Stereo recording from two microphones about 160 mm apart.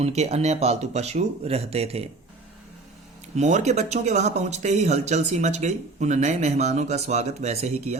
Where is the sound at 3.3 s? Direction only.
45° right (ahead or behind).